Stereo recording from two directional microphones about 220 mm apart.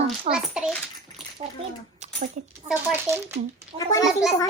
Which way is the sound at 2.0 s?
30° right (ahead or behind).